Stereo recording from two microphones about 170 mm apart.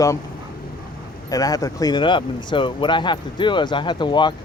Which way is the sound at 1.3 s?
20° left (ahead or behind).